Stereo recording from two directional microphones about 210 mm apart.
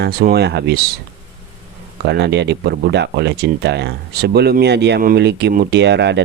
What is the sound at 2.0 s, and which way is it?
Speech, 55° right (ahead or behind).